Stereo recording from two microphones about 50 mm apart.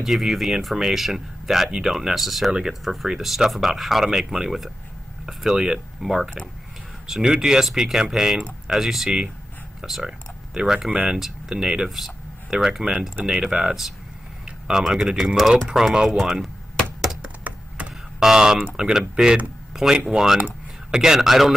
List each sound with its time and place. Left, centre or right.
0.0 s speech: centre
11.1 s speech: centre
17.2 s a sound: right
18.2 s speech: centre
19.7 s a sound: centre
20.1 s speech: centre